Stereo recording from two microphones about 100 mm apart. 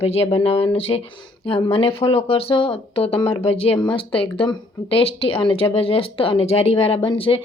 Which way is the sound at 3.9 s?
60° left (ahead or behind).